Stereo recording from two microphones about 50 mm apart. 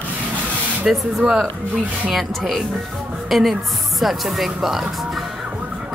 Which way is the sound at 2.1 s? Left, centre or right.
Centre.